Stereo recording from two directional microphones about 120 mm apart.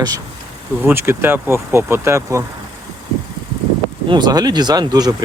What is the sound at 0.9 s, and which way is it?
Speech, 20° right (ahead or behind).